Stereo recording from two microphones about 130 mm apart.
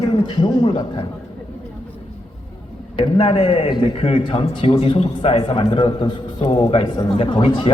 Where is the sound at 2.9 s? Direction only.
40° left (ahead or behind).